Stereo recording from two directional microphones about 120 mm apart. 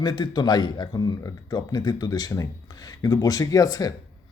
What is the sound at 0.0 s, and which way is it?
Speech, 35° left (ahead or behind).